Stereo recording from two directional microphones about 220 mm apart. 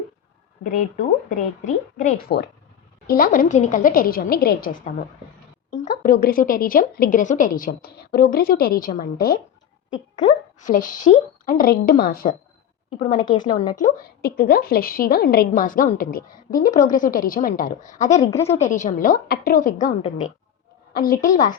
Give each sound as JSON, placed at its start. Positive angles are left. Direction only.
{"t": 0.6, "sound": "a woman's voice", "side_deg": 35}
{"t": 6.0, "sound": "a woman's voice", "side_deg": 40}
{"t": 10.6, "sound": "a woman's voice", "side_deg": 35}
{"t": 13.0, "sound": "a woman's voice", "side_deg": 20}
{"t": 13.7, "sound": "a woman's voice", "side_deg": 40}
{"t": 18.2, "sound": "a woman's voice", "side_deg": 15}
{"t": 18.4, "sound": "a woman's voice", "side_deg": 30}
{"t": 20.9, "sound": "a woman's voice", "side_deg": 40}